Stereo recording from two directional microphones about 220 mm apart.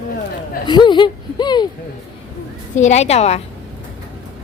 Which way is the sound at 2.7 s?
30° left (ahead or behind).